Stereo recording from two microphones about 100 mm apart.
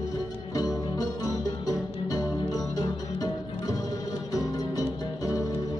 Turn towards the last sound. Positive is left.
turn(degrees=35)  # may be behind; listen again after turning